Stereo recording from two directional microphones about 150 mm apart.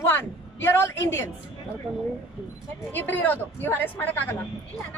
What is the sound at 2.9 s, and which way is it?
A woman's voice, 10° left (ahead or behind).